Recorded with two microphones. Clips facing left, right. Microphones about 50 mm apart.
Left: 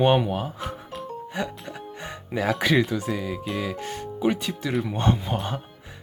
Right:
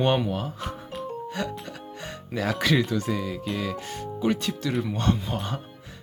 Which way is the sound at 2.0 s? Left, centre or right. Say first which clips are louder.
Left 3 dB; centre.